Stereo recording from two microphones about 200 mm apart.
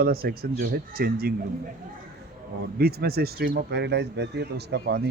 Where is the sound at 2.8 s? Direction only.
50° right (ahead or behind).